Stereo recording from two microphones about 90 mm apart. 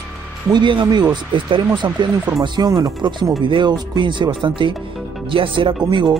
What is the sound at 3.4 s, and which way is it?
Speech, 65° right (ahead or behind).